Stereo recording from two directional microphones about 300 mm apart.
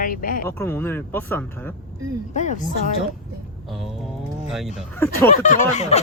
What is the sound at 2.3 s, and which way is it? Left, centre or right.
Speech, left.